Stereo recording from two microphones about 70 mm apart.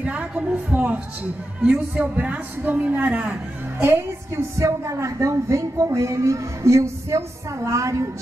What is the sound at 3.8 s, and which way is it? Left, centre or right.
A woman's voice, right.